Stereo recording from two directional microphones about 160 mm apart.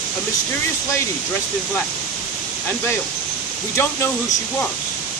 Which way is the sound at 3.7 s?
15° left (ahead or behind).